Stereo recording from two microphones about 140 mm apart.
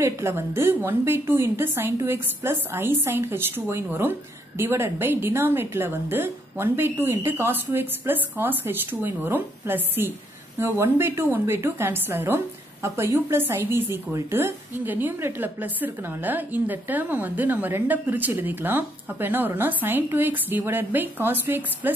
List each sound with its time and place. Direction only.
0.0 s a woman's voice: 20° right (ahead or behind)